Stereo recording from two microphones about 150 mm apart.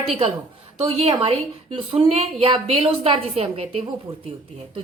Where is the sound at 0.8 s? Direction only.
40° right (ahead or behind).